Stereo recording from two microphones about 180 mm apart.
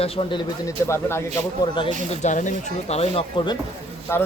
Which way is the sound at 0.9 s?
15° left (ahead or behind).